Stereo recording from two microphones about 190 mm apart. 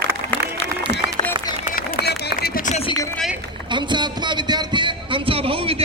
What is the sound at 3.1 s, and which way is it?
Run, centre (ahead or behind).